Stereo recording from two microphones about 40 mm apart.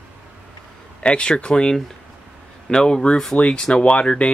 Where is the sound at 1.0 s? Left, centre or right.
Left.